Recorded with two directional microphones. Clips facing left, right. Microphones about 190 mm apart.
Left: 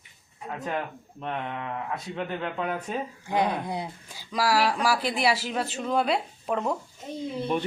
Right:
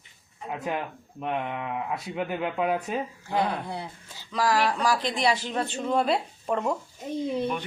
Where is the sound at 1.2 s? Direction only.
10° right (ahead or behind).